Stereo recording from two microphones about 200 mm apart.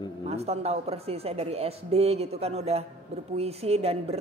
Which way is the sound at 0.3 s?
30° right (ahead or behind).